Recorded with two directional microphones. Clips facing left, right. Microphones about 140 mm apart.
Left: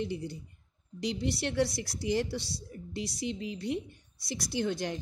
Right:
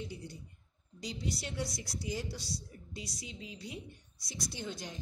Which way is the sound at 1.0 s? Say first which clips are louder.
Left 8 dB; 70° left (ahead or behind).